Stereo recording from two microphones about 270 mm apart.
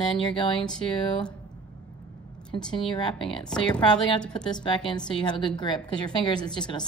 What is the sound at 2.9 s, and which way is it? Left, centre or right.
Speech, centre.